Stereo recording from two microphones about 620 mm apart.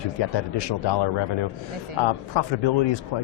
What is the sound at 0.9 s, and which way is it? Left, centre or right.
Speech, left.